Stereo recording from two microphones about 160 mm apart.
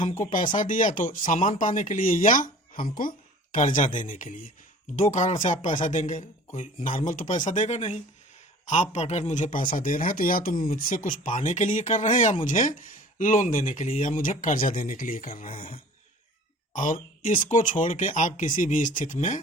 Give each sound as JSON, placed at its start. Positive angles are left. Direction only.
{"t": 0.2, "sound": "speech", "side_deg": 55}
{"t": 16.7, "sound": "speech", "side_deg": 55}